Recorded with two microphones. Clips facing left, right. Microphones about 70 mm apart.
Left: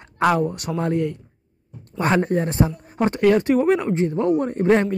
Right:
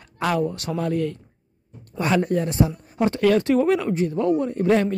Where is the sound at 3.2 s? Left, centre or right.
Left.